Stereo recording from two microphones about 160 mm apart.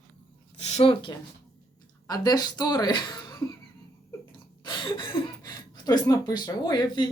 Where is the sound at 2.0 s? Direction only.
25° left (ahead or behind).